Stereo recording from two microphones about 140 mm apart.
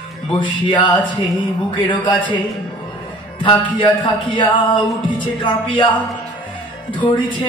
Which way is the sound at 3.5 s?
35° left (ahead or behind).